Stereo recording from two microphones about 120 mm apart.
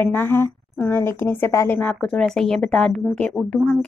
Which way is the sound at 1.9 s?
5° left (ahead or behind).